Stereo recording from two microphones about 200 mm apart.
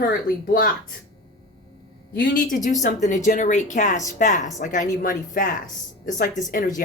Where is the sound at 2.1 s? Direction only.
45° left (ahead or behind).